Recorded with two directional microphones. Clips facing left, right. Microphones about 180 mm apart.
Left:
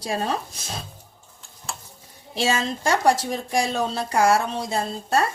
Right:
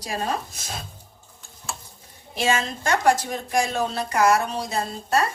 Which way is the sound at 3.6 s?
30° left (ahead or behind).